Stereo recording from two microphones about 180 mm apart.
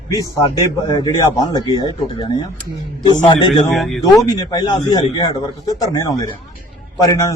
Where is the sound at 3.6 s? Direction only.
Centre (ahead or behind).